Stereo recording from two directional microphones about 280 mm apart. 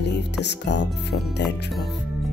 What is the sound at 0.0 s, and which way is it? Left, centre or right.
Speech, left.